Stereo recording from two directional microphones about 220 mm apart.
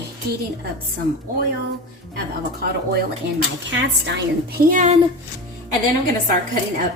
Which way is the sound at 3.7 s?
55° right (ahead or behind).